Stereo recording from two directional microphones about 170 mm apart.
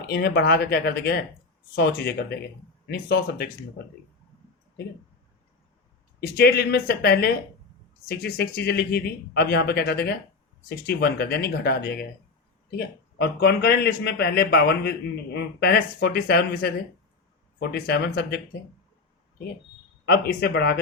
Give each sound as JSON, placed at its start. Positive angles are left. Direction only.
{"t": 0.1, "sound": "speech", "side_deg": 70}
{"t": 6.1, "sound": "speech", "side_deg": 70}
{"t": 20.1, "sound": "speech", "side_deg": 70}